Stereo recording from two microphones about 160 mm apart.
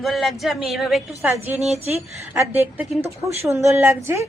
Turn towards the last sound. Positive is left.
turn(degrees=-15)  # may be behind; listen again after turning